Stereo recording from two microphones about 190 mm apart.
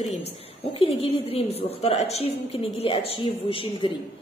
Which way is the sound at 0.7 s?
30° left (ahead or behind).